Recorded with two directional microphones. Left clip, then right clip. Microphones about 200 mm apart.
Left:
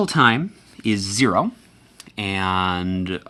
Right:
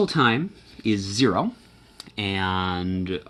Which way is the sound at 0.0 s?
45° left (ahead or behind).